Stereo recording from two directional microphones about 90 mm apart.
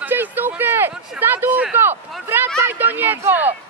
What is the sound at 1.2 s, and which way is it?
Speech, 20° right (ahead or behind).